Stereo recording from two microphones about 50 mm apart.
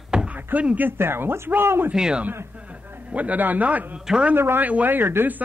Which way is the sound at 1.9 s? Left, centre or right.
Centre.